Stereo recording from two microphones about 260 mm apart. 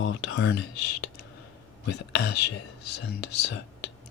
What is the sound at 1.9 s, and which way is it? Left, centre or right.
Speech, left.